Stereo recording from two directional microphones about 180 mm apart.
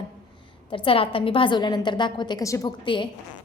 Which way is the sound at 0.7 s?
30° left (ahead or behind).